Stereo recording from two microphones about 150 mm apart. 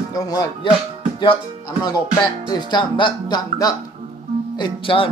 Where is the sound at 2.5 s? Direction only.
30° left (ahead or behind).